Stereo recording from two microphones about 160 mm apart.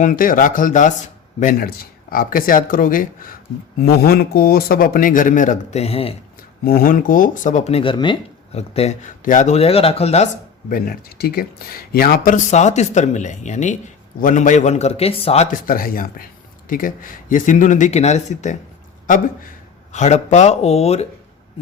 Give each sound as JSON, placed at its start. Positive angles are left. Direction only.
{"t": 0.0, "sound": "speech", "side_deg": 55}
{"t": 1.5, "sound": "speech", "side_deg": 70}
{"t": 4.0, "sound": "speech", "side_deg": 70}
{"t": 6.7, "sound": "speech", "side_deg": 65}
{"t": 8.5, "sound": "speech", "side_deg": 40}
{"t": 10.7, "sound": "speech", "side_deg": 65}
{"t": 15.4, "sound": "speech", "side_deg": 60}
{"t": 19.9, "sound": "speech", "side_deg": 45}